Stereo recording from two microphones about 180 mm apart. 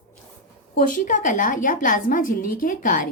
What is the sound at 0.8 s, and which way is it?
A woman's voice, 45° left (ahead or behind).